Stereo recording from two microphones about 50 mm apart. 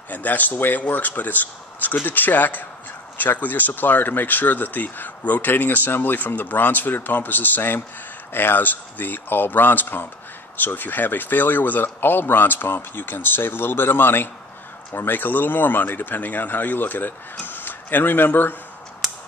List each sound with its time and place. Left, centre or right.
0.1 s speech: left
5.5 s a man's voice: left